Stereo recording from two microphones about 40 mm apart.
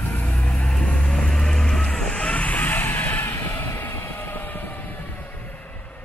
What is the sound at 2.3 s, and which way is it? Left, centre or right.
Vehicle, left.